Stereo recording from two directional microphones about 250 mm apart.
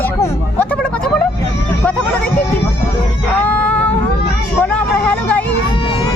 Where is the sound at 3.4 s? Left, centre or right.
Centre.